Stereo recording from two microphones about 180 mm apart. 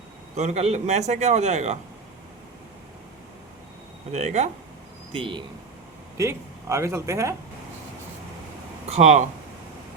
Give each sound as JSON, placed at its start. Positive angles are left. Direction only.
{"t": 0.3, "sound": "a man's voice", "side_deg": -40}
{"t": 4.1, "sound": "a man's voice", "side_deg": -40}
{"t": 5.1, "sound": "speech", "side_deg": -30}
{"t": 6.1, "sound": "speech", "side_deg": -15}
{"t": 8.9, "sound": "a man's voice", "side_deg": -40}